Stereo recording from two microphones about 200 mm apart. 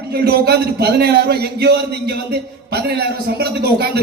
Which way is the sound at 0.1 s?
55° right (ahead or behind).